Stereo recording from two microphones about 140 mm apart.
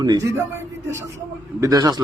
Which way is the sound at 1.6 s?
25° right (ahead or behind).